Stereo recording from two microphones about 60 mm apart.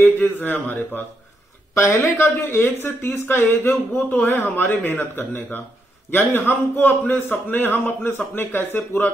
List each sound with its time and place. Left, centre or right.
0.0 s speech: left
1.8 s speech: left